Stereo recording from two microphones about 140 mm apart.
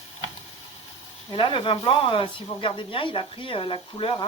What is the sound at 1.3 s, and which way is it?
Speech, 35° left (ahead or behind).